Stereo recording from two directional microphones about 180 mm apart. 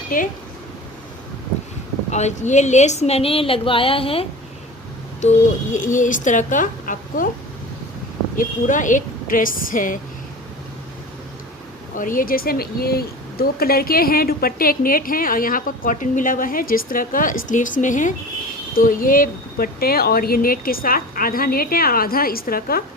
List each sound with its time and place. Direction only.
0.1 s speech: 50° left (ahead or behind)
2.0 s a woman's voice: 40° left (ahead or behind)
5.7 s speech: 45° left (ahead or behind)
8.4 s speech: 45° left (ahead or behind)
11.9 s speech: 50° left (ahead or behind)